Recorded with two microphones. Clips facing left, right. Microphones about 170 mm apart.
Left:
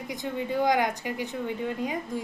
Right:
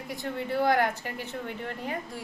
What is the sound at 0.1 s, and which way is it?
A woman's voice, 15° left (ahead or behind).